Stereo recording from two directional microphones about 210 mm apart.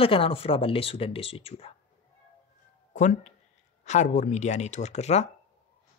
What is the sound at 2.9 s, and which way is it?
Speech, 35° left (ahead or behind).